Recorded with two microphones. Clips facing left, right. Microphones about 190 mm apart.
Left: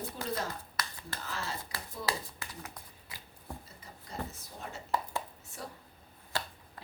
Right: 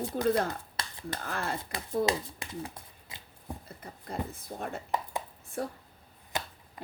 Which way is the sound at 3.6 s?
55° right (ahead or behind).